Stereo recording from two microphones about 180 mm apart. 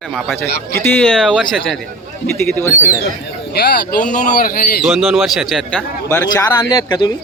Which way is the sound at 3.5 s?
60° left (ahead or behind).